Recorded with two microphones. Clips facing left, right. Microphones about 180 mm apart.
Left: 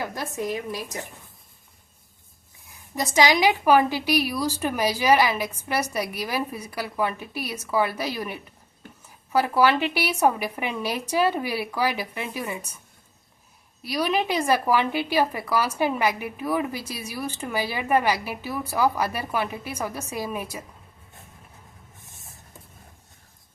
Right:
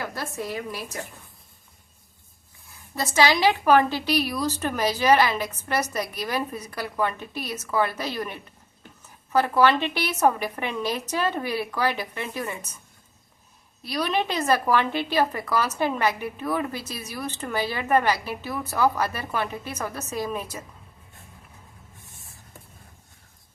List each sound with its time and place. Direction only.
0.0 s a woman's voice: 15° left (ahead or behind)
2.6 s a woman's voice: 15° left (ahead or behind)
13.8 s a woman's voice: 10° left (ahead or behind)